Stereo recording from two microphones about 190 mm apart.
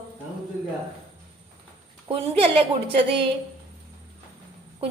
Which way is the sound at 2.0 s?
30° right (ahead or behind).